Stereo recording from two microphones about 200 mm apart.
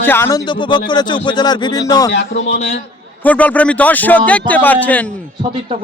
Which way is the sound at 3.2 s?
5° left (ahead or behind).